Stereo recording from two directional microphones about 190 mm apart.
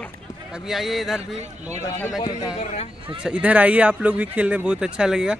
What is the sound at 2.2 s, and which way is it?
Speech, 25° left (ahead or behind).